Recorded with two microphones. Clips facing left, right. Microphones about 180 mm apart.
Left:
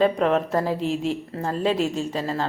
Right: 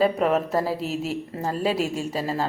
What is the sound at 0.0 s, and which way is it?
A woman's voice, 5° right (ahead or behind).